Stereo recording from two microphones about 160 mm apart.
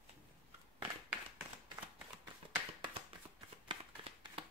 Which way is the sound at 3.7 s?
35° right (ahead or behind).